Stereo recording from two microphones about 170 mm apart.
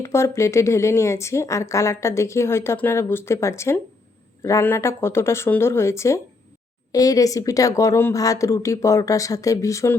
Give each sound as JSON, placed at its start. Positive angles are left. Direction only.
{"t": 0.0, "sound": "a woman's voice", "side_deg": 15}